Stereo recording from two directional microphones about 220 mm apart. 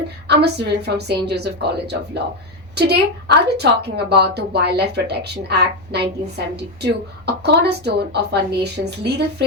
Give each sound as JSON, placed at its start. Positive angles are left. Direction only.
{"t": 0.3, "sound": "a woman's voice", "side_deg": -50}